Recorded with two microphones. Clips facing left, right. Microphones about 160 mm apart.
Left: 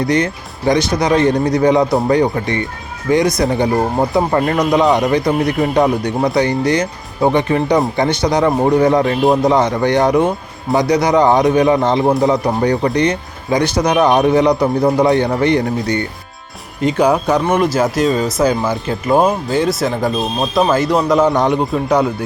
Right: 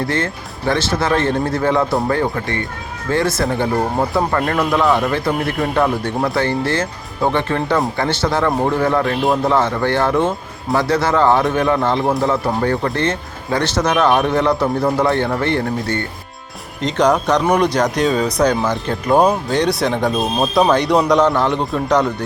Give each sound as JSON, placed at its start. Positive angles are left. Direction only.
{"t": 0.0, "sound": "speech", "side_deg": 15}
{"t": 21.3, "sound": "speech", "side_deg": 15}